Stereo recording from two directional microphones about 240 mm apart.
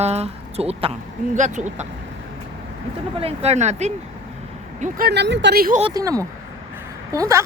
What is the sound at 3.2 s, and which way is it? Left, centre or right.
Speech, right.